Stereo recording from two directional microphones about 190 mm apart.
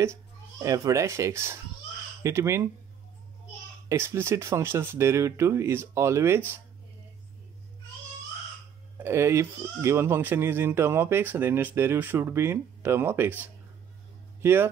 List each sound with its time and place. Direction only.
0.0 s speech: 15° right (ahead or behind)
3.9 s speech: 15° right (ahead or behind)
8.9 s speech: 15° right (ahead or behind)